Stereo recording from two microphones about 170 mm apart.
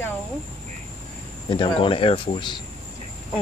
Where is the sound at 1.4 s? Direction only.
25° left (ahead or behind).